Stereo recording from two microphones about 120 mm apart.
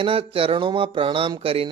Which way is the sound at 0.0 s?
50° right (ahead or behind).